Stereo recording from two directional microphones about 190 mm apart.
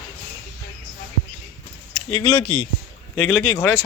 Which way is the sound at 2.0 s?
25° left (ahead or behind).